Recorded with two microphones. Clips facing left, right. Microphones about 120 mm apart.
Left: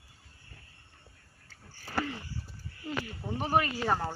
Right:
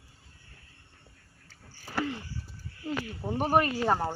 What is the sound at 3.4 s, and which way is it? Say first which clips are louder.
Speech: right 3 dB; 50° right (ahead or behind).